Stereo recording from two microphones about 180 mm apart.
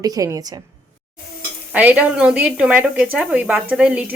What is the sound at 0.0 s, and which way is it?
Speech, 20° right (ahead or behind).